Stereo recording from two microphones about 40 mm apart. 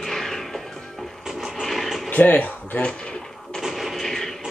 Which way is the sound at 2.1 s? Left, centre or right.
Left.